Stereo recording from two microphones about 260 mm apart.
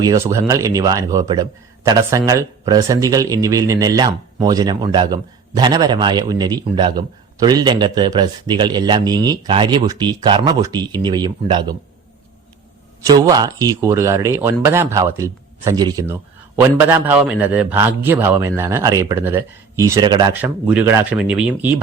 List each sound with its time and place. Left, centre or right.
0.0 s a man's voice: centre
13.1 s a man's voice: centre